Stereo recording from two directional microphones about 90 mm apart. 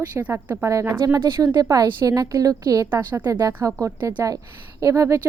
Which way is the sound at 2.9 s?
25° right (ahead or behind).